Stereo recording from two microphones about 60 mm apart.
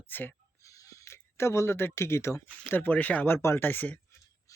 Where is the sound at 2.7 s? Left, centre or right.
Left.